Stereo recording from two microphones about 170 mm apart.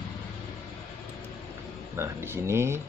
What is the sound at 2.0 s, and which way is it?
Speech, 15° right (ahead or behind).